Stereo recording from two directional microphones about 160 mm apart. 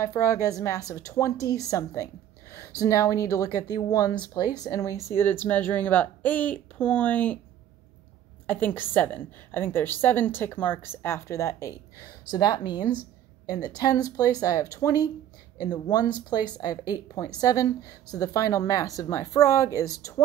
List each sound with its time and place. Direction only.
0.2 s a woman's voice: 20° left (ahead or behind)
8.5 s a woman's voice: 10° left (ahead or behind)